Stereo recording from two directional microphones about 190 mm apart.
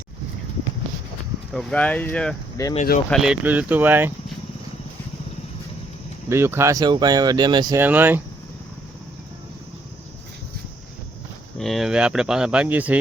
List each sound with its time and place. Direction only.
1.5 s speech: 5° left (ahead or behind)
2.6 s speech: 20° left (ahead or behind)
3.1 s speech: 5° right (ahead or behind)
6.2 s speech: 15° right (ahead or behind)
7.8 s speech: 10° right (ahead or behind)
11.5 s speech: centre (ahead or behind)